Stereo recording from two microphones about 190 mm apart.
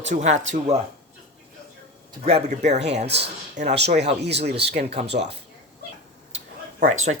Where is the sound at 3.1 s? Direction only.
60° right (ahead or behind).